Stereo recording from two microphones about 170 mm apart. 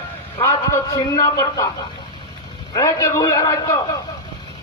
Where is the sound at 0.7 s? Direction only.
20° left (ahead or behind).